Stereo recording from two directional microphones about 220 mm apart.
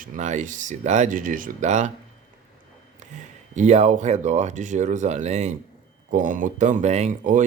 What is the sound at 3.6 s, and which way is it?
Speech, 30° right (ahead or behind).